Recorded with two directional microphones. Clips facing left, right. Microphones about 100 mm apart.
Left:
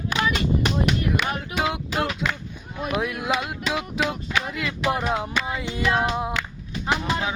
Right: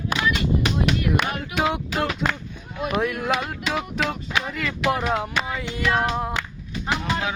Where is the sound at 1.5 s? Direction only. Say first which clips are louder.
Right 4 dB; centre (ahead or behind).